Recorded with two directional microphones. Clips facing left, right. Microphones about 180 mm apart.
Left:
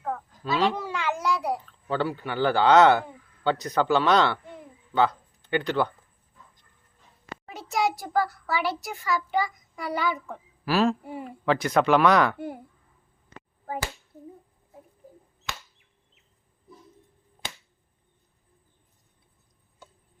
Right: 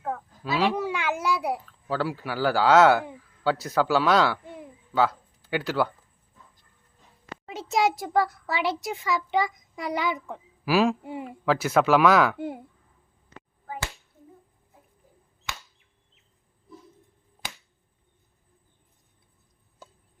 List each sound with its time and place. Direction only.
0.0 s a child's voice: 5° right (ahead or behind)
7.4 s a child's voice: 20° right (ahead or behind)
11.0 s a woman's voice: 20° right (ahead or behind)
11.3 s speech: 5° right (ahead or behind)
12.4 s a woman's voice: 20° right (ahead or behind)